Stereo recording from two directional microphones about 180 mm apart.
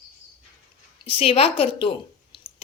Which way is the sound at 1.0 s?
30° left (ahead or behind).